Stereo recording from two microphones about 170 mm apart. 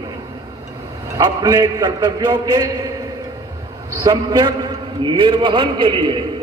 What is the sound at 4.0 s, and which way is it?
A man's voice, 25° right (ahead or behind).